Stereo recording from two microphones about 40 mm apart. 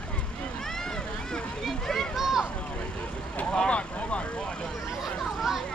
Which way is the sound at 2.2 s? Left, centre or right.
Centre.